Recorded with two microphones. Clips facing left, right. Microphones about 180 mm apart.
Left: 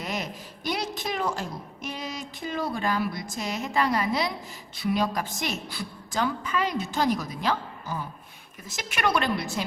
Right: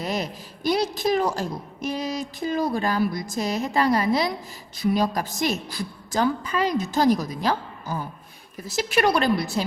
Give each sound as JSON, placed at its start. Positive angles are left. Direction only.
{"t": 0.0, "sound": "a woman's voice", "side_deg": -35}